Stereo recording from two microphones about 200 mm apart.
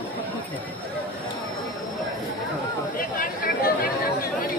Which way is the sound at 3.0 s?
45° left (ahead or behind).